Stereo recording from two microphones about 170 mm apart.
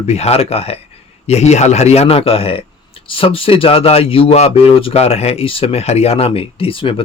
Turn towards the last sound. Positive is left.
turn(degrees=30)  # may be behind; listen again after turning